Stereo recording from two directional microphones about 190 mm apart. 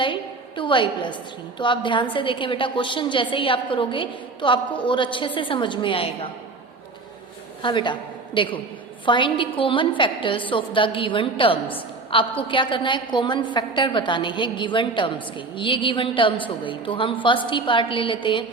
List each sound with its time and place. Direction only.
0.0 s a sound: 25° left (ahead or behind)
1.5 s a woman's voice: 25° left (ahead or behind)
7.6 s a woman's voice: 25° left (ahead or behind)